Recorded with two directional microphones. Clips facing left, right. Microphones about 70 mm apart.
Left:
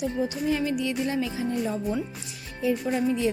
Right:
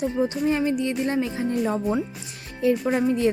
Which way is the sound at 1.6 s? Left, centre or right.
Right.